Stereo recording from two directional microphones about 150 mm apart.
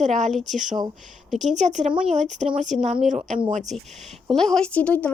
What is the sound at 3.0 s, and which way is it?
Speech, 55° right (ahead or behind).